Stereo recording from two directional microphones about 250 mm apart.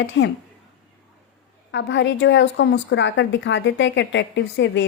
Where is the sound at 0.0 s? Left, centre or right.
Left.